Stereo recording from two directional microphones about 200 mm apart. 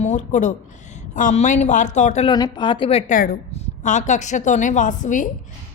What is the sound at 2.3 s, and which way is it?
Speech, 25° left (ahead or behind).